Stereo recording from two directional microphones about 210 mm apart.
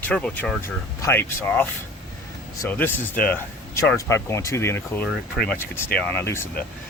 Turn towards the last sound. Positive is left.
turn(degrees=10)  # may be behind; listen again after turning